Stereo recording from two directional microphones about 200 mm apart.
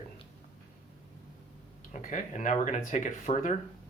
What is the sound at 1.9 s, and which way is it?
Speech, 40° left (ahead or behind).